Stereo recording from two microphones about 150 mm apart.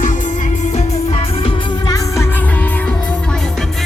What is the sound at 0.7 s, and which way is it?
Music, 45° left (ahead or behind).